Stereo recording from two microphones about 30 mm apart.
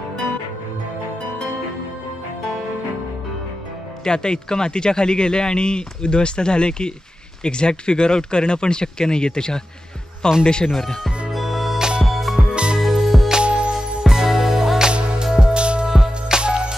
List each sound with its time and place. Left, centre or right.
4.0 s a man's voice: left
10.7 s speech: centre
11.3 s music: centre
12.4 s music: right
12.8 s music: centre
13.4 s music: right
14.0 s music: centre
14.9 s music: right
15.9 s music: centre
16.3 s music: right